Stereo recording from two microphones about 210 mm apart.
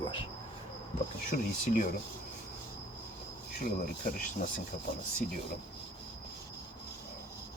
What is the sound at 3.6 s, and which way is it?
Speech, 45° left (ahead or behind).